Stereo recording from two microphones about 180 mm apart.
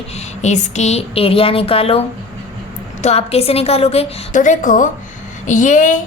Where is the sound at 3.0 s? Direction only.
35° left (ahead or behind).